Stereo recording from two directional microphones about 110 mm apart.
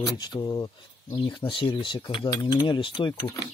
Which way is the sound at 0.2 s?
40° left (ahead or behind).